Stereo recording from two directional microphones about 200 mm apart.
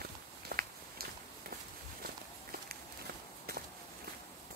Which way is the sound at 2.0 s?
50° right (ahead or behind).